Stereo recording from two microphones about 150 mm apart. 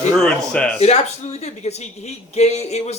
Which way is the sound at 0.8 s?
45° left (ahead or behind).